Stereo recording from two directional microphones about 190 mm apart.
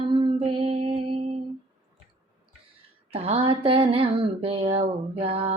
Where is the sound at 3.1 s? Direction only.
30° right (ahead or behind).